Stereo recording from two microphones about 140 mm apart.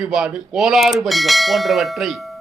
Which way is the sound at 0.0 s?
5° right (ahead or behind).